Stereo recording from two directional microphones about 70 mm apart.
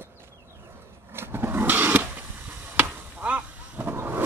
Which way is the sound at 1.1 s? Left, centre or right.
Right.